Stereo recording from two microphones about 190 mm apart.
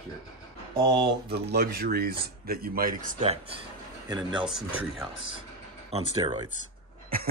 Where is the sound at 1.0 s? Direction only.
60° right (ahead or behind).